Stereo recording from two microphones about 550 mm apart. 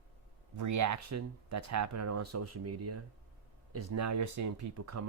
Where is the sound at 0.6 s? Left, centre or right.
Right.